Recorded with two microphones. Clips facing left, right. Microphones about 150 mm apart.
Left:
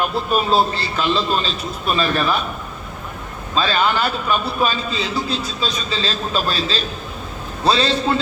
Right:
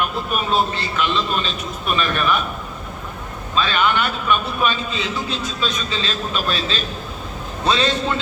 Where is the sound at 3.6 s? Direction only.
35° left (ahead or behind).